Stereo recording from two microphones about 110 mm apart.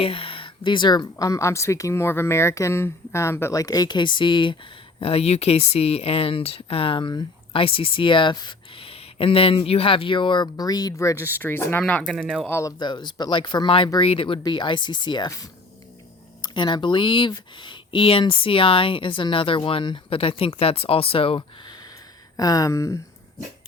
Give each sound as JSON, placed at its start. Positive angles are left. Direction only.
{"t": 0.0, "sound": "speech", "side_deg": 60}
{"t": 4.9, "sound": "speech", "side_deg": 65}
{"t": 7.5, "sound": "speech", "side_deg": 55}
{"t": 12.5, "sound": "speech", "side_deg": 25}
{"t": 12.8, "sound": "speech", "side_deg": 45}
{"t": 14.4, "sound": "speech", "side_deg": 45}
{"t": 16.4, "sound": "speech", "side_deg": 45}
{"t": 22.4, "sound": "speech", "side_deg": 35}